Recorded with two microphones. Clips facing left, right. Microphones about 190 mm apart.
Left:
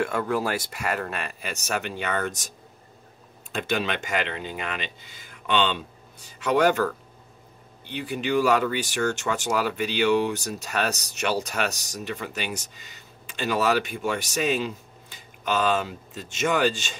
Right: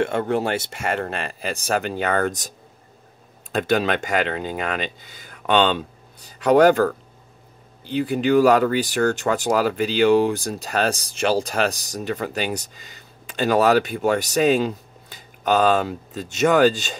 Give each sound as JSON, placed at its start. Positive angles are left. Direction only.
{"t": 0.0, "sound": "speech", "side_deg": -25}
{"t": 3.5, "sound": "speech", "side_deg": -40}